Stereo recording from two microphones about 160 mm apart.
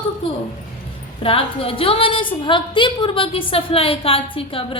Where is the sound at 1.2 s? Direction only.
35° left (ahead or behind).